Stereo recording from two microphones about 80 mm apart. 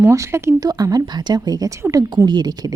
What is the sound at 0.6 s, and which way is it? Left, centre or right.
A woman's voice, right.